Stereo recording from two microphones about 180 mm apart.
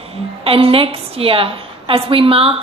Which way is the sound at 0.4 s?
30° right (ahead or behind).